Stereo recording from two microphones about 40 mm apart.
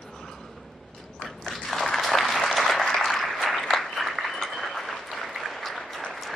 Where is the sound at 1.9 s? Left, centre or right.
Centre.